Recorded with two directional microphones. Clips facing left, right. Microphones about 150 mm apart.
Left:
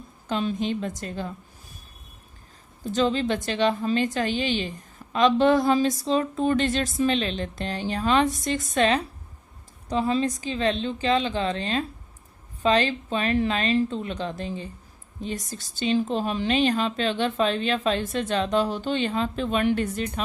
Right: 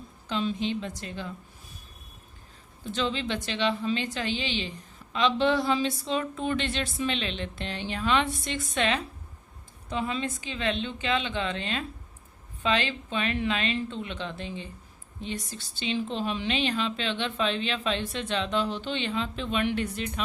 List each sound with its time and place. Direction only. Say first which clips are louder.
0.3 s a woman's voice: left 3 dB; 45° left (ahead or behind)
2.8 s a woman's voice: left 6 dB; 45° left (ahead or behind)